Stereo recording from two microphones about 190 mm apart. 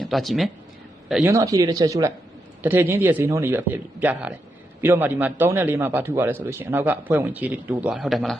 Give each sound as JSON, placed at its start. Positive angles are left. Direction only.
{"t": 0.0, "sound": "speech", "side_deg": 0}
{"t": 1.2, "sound": "a man's voice", "side_deg": -15}